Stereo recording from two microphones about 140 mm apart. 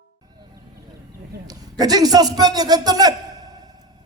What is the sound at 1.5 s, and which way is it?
A man's voice, 30° right (ahead or behind).